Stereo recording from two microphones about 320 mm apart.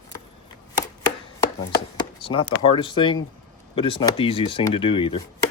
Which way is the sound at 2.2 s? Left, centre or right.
Centre.